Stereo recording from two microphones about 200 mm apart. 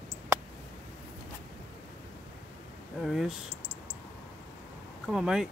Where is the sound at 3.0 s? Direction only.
Centre (ahead or behind).